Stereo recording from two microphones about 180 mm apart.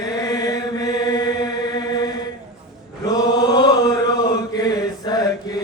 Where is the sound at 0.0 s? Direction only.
20° left (ahead or behind).